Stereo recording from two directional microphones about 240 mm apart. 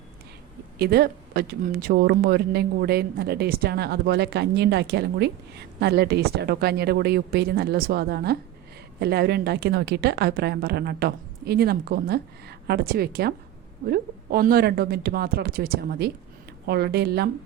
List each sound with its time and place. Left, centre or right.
0.8 s speech: right